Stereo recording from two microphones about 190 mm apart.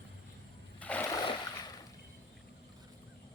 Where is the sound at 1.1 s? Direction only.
20° left (ahead or behind).